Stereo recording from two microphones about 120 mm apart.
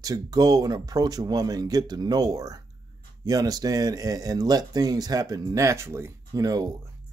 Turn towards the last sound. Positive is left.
turn(degrees=-30)  # may be behind; listen again after turning